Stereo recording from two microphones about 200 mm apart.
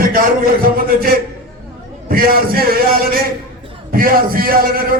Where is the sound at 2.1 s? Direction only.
45° right (ahead or behind).